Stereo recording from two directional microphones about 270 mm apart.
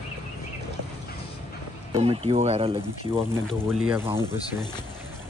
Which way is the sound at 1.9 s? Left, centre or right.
Right.